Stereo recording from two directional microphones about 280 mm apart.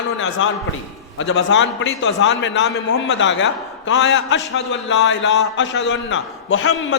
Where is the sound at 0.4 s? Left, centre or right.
Left.